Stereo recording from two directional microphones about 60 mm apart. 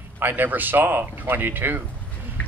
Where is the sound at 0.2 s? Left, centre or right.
Right.